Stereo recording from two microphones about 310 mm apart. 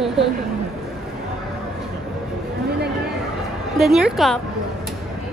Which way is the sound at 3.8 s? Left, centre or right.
Centre.